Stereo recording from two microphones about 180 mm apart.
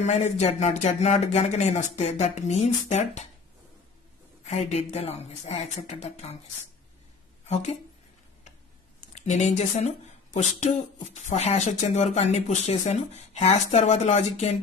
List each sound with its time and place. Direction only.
0.0 s speech: 40° left (ahead or behind)
4.5 s speech: 35° left (ahead or behind)
9.1 s speech: 40° left (ahead or behind)